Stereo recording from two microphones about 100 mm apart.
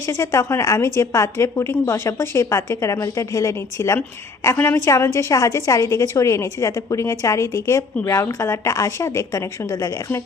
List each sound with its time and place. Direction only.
0.0 s a woman's voice: 35° left (ahead or behind)